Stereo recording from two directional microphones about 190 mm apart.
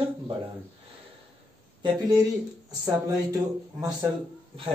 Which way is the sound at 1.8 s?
20° right (ahead or behind).